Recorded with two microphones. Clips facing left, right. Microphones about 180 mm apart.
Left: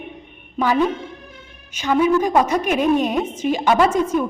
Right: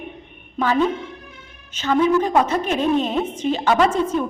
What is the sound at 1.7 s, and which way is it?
A woman's voice, 10° left (ahead or behind).